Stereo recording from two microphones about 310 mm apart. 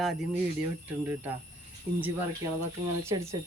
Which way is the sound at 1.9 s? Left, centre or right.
Right.